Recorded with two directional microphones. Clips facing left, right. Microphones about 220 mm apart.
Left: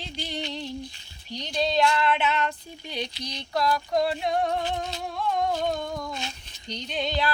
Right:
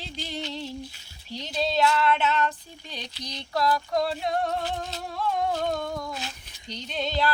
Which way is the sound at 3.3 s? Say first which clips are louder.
Even; 5° right (ahead or behind).